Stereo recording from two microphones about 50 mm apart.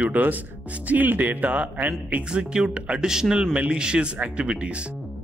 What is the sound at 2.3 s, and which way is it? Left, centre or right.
Speech, centre.